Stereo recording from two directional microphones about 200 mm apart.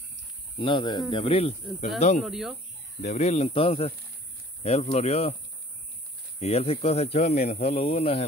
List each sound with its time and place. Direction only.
0.6 s speech: 25° left (ahead or behind)
2.2 s speech: centre (ahead or behind)
3.0 s speech: 35° left (ahead or behind)
6.4 s speech: 30° left (ahead or behind)